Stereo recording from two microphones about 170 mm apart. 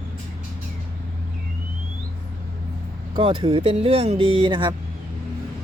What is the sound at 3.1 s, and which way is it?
Speech, 30° right (ahead or behind).